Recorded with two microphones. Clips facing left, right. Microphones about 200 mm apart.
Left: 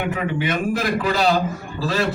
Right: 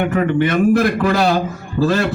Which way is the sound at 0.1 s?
55° right (ahead or behind).